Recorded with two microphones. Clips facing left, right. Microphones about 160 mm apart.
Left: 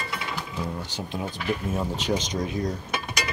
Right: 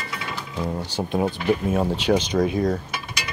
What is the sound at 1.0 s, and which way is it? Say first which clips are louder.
Speech: right 10 dB; 60° right (ahead or behind).